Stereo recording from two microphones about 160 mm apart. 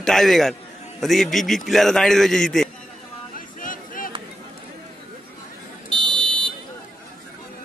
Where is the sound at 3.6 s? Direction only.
60° left (ahead or behind).